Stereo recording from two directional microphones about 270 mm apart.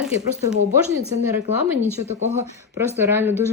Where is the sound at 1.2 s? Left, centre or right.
Centre.